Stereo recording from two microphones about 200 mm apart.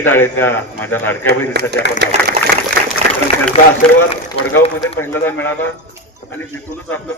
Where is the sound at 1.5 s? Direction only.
55° right (ahead or behind).